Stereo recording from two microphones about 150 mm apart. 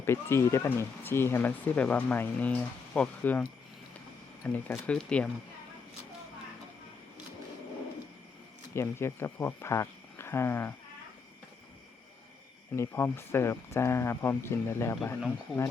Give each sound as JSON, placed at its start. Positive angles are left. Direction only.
{"t": 0.0, "sound": "speech", "side_deg": 15}
{"t": 4.4, "sound": "speech", "side_deg": 10}
{"t": 8.7, "sound": "speech", "side_deg": 15}
{"t": 12.7, "sound": "speech", "side_deg": 15}